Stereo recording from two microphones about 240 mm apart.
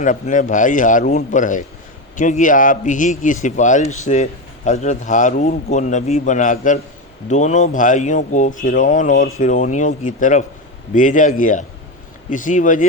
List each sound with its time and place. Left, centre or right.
0.0 s speech: left